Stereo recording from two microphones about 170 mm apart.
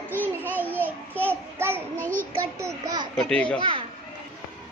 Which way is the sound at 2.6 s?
20° right (ahead or behind).